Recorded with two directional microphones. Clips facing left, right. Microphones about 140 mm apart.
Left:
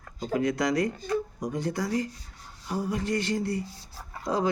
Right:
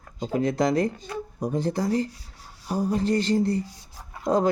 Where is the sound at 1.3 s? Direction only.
30° right (ahead or behind).